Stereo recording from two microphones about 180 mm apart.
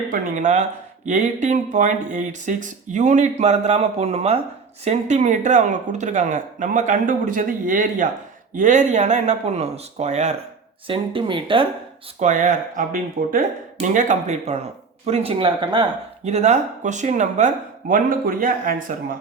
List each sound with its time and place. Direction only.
0.1 s speech: 45° right (ahead or behind); by 11.6 s 30° right (ahead or behind)
12.2 s speech: 45° right (ahead or behind); by 15.9 s 25° right (ahead or behind)
16.2 s speech: 40° right (ahead or behind)